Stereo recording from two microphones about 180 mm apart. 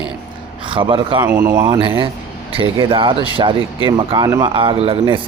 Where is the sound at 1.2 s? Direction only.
15° right (ahead or behind).